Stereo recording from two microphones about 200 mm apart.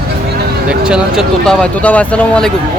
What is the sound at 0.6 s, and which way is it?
Speech, 5° right (ahead or behind).